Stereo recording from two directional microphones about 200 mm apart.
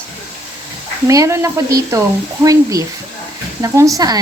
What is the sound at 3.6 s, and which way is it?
Speech, 15° right (ahead or behind).